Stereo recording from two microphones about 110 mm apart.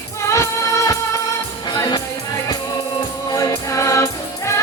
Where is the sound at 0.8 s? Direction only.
30° left (ahead or behind).